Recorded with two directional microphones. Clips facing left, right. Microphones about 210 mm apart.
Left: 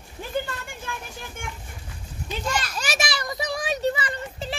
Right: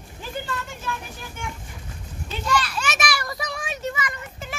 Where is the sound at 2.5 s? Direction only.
45° left (ahead or behind); by 3.5 s 20° left (ahead or behind).